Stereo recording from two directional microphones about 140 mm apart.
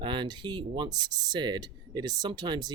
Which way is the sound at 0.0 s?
35° right (ahead or behind).